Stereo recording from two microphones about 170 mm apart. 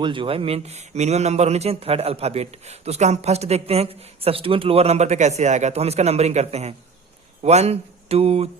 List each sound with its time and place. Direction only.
0.0 s a man's voice: 30° right (ahead or behind)